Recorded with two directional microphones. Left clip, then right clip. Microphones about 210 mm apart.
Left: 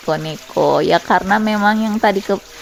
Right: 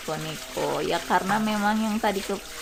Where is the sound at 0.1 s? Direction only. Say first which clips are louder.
Left 12 dB; 35° left (ahead or behind).